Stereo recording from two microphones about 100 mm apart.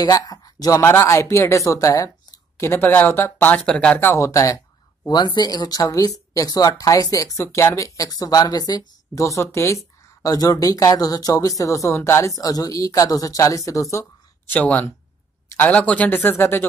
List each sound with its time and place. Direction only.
0.0 s speech: 40° left (ahead or behind)
0.8 s speech: 25° left (ahead or behind); by 4.0 s 10° left (ahead or behind)
4.0 s speech: 30° left (ahead or behind)
5.0 s speech: 45° left (ahead or behind)
14.5 s speech: 15° left (ahead or behind)
16.2 s speech: 25° left (ahead or behind)